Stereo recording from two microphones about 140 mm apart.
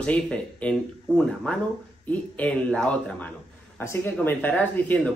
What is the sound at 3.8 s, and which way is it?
Speech, 20° left (ahead or behind).